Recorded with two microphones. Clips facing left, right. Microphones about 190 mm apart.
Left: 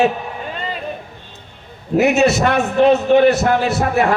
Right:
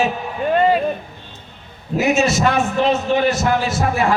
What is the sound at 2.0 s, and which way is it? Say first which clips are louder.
A man's voice: left 3 dB; 65° left (ahead or behind).